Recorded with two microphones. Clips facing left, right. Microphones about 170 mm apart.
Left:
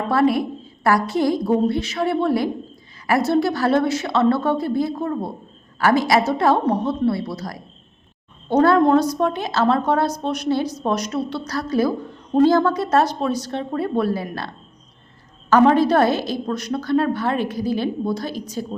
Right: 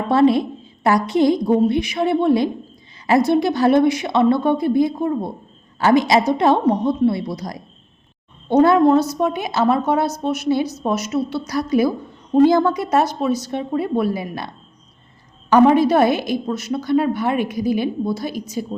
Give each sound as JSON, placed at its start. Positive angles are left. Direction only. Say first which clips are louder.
{"t": 0.1, "sound": "a woman's voice", "louder": "right 4 dB", "side_deg": -20}